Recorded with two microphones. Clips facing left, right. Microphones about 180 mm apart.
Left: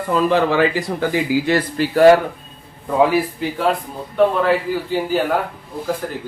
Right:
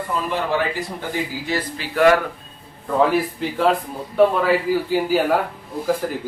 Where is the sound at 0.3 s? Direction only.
90° left.